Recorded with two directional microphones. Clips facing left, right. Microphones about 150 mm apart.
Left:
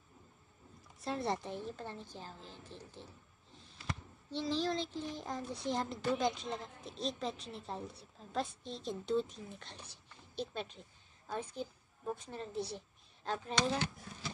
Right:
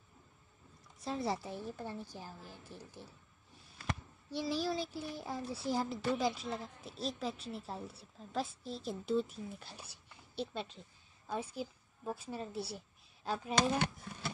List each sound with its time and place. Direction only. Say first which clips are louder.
0.9 s a woman's voice: even; centre (ahead or behind)
4.3 s a child's voice: even; 10° right (ahead or behind)
13.6 s speech: right 3 dB; 60° right (ahead or behind)